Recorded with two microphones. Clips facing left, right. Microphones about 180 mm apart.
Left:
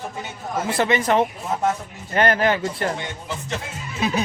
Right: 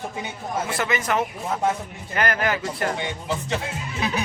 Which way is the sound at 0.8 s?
30° left (ahead or behind).